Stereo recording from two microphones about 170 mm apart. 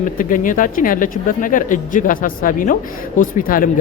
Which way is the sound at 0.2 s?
50° left (ahead or behind).